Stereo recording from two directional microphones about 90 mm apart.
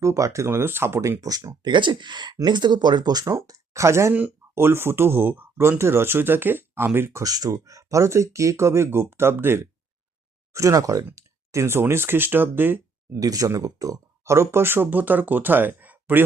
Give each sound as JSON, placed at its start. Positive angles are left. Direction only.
{"t": 0.0, "sound": "speech", "side_deg": -35}
{"t": 1.6, "sound": "speech", "side_deg": -60}
{"t": 7.2, "sound": "speech", "side_deg": -45}
{"t": 10.5, "sound": "speech", "side_deg": -35}
{"t": 13.1, "sound": "speech", "side_deg": -40}